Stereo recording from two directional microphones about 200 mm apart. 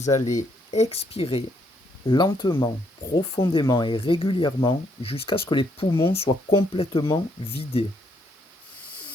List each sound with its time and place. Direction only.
0.0 s speech: 35° left (ahead or behind)